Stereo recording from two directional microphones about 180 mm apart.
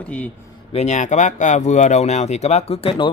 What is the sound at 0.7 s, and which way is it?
Speech, 40° left (ahead or behind).